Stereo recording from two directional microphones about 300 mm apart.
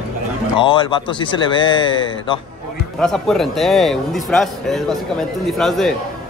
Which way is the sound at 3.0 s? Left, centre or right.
Centre.